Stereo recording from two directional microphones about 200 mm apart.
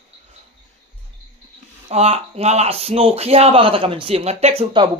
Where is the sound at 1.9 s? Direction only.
30° right (ahead or behind).